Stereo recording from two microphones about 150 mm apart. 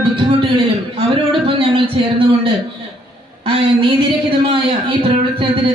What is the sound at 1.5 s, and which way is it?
Speech, 35° right (ahead or behind).